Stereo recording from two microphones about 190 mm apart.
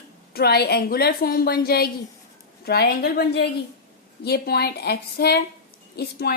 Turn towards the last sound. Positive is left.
turn(degrees=55)  # may be behind; listen again after turning